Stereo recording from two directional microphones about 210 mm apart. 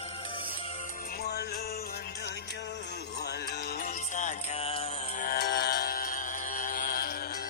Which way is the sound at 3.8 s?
35° left (ahead or behind).